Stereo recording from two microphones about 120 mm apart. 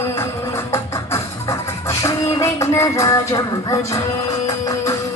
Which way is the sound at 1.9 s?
25° left (ahead or behind).